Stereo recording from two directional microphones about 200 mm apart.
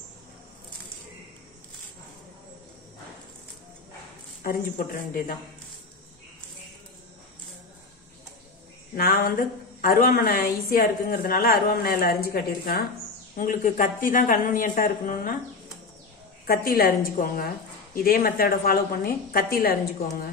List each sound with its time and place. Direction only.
4.4 s speech: 45° left (ahead or behind)
8.9 s speech: 45° left (ahead or behind)
16.4 s speech: 50° left (ahead or behind)